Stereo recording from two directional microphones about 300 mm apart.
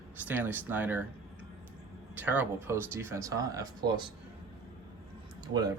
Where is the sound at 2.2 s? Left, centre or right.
Centre.